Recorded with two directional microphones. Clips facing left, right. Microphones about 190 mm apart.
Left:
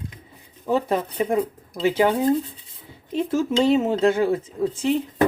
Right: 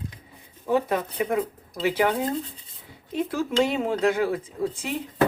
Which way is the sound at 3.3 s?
25° left (ahead or behind).